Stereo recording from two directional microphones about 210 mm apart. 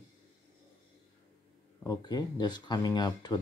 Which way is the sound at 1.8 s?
20° left (ahead or behind).